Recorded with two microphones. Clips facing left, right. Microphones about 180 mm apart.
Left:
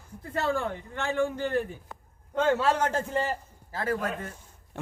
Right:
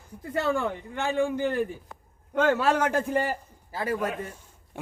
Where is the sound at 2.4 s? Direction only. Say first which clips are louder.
Right 2 dB; 65° right (ahead or behind).